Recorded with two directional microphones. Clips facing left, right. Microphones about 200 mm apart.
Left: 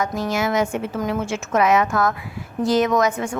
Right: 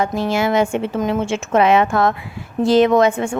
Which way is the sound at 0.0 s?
30° right (ahead or behind).